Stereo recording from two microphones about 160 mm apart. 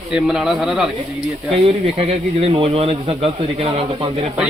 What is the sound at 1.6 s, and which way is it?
Speech, 40° right (ahead or behind).